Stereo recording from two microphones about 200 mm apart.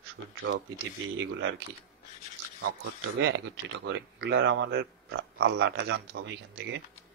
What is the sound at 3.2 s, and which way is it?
Speech, 65° right (ahead or behind).